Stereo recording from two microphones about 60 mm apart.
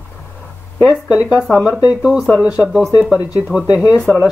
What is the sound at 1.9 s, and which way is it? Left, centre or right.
Speech, centre.